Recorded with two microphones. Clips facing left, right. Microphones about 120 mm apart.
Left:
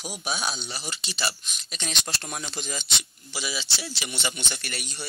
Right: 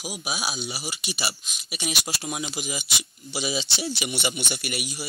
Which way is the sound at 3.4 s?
20° right (ahead or behind).